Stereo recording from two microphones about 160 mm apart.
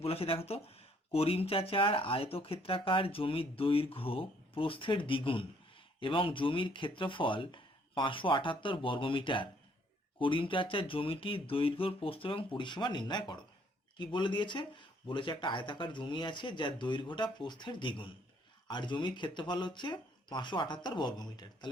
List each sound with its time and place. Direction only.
0.0 s speech: 35° left (ahead or behind)